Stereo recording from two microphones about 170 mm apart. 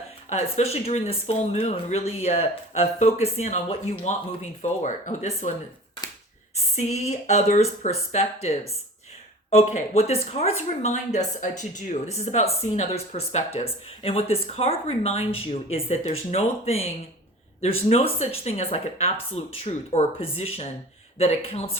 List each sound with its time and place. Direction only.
0.3 s speech: 40° left (ahead or behind)
6.7 s speech: 40° left (ahead or behind)